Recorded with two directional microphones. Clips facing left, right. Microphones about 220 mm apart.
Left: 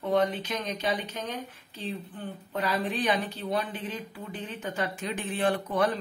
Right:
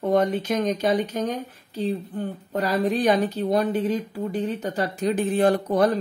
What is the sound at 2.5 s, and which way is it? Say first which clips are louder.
Speech: right 7 dB; 40° right (ahead or behind).